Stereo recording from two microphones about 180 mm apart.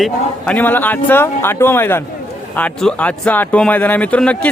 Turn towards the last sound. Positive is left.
turn(degrees=5)  # may be behind; listen again after turning